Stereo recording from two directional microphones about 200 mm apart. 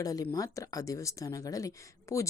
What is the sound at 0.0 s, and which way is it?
Speech, 15° left (ahead or behind).